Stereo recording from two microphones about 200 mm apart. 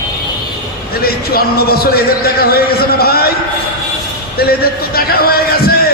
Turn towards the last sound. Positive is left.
turn(degrees=50)  # may be behind; listen again after turning